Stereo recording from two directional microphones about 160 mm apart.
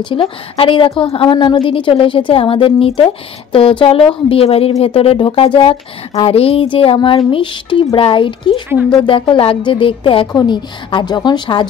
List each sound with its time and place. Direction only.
0.0 s a woman's voice: 35° left (ahead or behind)